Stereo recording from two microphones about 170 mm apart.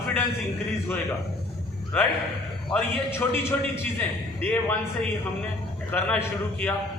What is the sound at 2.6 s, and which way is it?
A man's voice, 10° left (ahead or behind).